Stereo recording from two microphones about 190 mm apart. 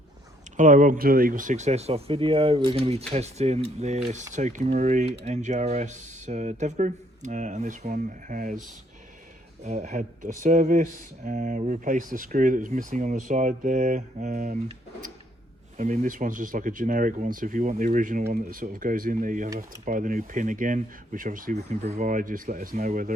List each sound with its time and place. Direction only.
0.5 s speech: 45° right (ahead or behind)
9.6 s speech: 40° right (ahead or behind)
15.8 s speech: 45° right (ahead or behind)